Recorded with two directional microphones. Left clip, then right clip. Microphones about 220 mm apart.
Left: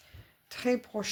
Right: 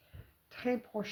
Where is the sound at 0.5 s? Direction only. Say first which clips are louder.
Left 5 dB; 40° left (ahead or behind).